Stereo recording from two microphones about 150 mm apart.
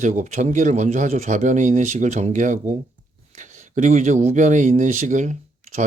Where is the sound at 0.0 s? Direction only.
55° right (ahead or behind).